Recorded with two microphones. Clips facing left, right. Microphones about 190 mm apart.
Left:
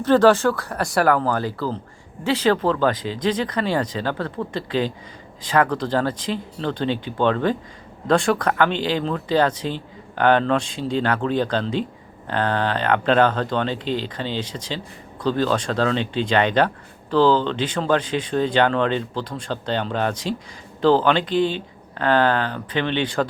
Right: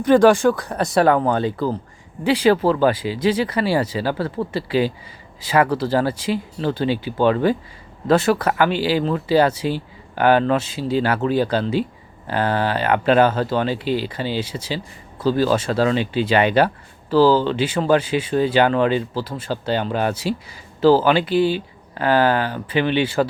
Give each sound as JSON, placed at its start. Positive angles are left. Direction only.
{"t": 0.0, "sound": "speech", "side_deg": -15}